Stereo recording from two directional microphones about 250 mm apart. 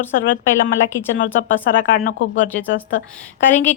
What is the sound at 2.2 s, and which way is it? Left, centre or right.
Speech, left.